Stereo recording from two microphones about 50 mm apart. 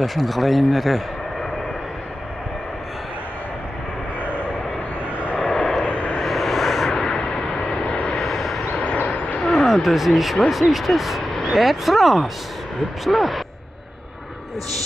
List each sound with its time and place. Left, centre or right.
0.0 s speech: centre
5.4 s vehicle: centre
5.9 s vehicle: left
6.1 s vehicle: centre
8.2 s vehicle: centre
8.8 s vehicle: left
9.5 s speech: centre